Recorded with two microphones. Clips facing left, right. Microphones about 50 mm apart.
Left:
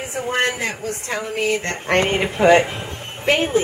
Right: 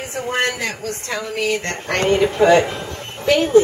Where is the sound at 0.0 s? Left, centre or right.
Centre.